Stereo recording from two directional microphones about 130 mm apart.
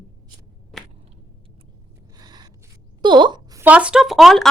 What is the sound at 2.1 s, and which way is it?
Gasp, 30° right (ahead or behind).